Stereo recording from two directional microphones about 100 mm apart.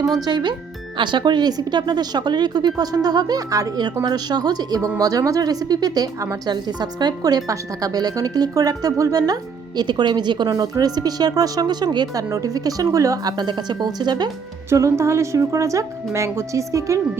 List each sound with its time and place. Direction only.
0.3 s speech: 45° right (ahead or behind)
14.7 s speech: 30° right (ahead or behind)